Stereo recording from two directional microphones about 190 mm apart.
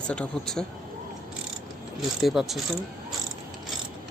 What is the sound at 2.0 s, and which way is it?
Speech, centre (ahead or behind).